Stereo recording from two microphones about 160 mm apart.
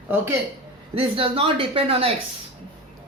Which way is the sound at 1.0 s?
35° right (ahead or behind).